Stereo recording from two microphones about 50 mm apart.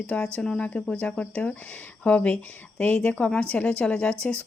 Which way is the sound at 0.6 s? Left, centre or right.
Left.